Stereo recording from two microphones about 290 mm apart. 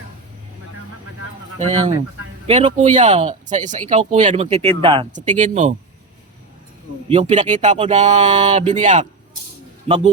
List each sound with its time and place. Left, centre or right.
1.5 s speech: right
7.1 s speech: right